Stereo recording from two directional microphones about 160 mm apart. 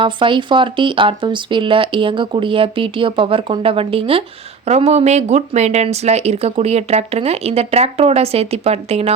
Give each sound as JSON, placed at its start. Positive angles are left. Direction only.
{"t": 0.0, "sound": "speech", "side_deg": -30}